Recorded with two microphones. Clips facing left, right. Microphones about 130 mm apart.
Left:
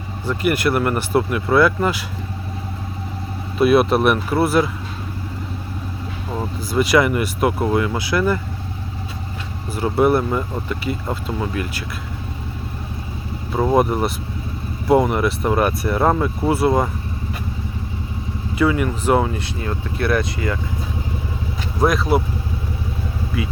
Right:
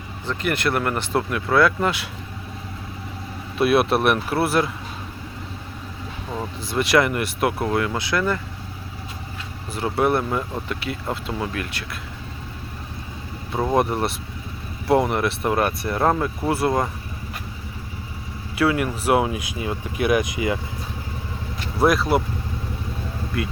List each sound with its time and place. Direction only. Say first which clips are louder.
0.3 s speech: left 4 dB; 5° left (ahead or behind)
3.6 s speech: left 4 dB; centre (ahead or behind)
6.3 s speech: left 4 dB; 5° left (ahead or behind)
9.7 s speech: left 4 dB; centre (ahead or behind)
13.5 s speech: left 4 dB; 5° left (ahead or behind)
18.5 s speech: left 2 dB; 5° right (ahead or behind)
21.8 s speech: left 1 dB; centre (ahead or behind)
23.3 s speech: left 1 dB; centre (ahead or behind)